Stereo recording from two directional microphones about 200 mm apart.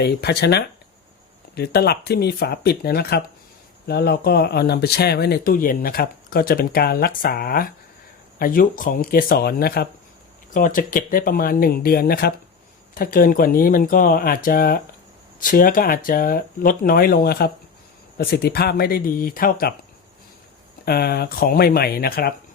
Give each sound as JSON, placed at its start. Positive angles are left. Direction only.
{"t": 0.0, "sound": "speech", "side_deg": 55}
{"t": 20.8, "sound": "speech", "side_deg": 50}